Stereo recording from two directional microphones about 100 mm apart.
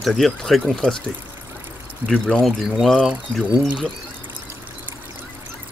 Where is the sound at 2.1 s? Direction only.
5° left (ahead or behind).